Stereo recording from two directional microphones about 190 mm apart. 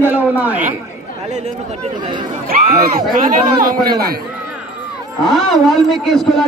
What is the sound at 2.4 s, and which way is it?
Speech, 50° right (ahead or behind).